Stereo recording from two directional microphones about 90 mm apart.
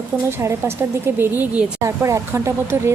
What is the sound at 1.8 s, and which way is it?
Speech, 35° right (ahead or behind).